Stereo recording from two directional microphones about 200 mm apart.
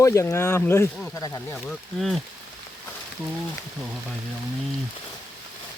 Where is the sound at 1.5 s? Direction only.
Centre (ahead or behind).